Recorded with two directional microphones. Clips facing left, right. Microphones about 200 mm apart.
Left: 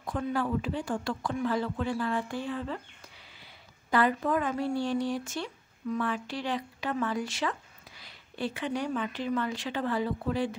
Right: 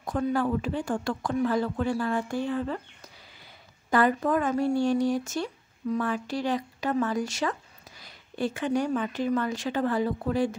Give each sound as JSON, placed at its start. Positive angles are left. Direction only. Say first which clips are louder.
{"t": 0.0, "sound": "speech", "louder": "right 4 dB", "side_deg": -45}
{"t": 3.9, "sound": "speech", "louder": "right 3 dB", "side_deg": -45}